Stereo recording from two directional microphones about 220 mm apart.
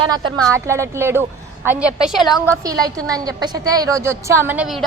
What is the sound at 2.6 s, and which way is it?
A woman's voice, 15° right (ahead or behind).